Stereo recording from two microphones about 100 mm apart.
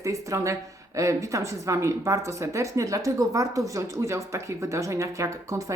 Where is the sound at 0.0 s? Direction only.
30° right (ahead or behind).